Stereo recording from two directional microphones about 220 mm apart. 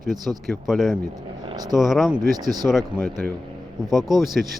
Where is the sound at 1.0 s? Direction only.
20° right (ahead or behind).